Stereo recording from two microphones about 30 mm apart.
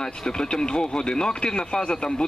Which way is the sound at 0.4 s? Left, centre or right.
Left.